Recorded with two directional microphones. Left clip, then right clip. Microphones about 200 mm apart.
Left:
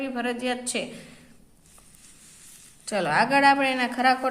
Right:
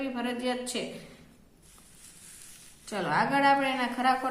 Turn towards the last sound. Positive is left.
turn(degrees=40)  # may be behind; listen again after turning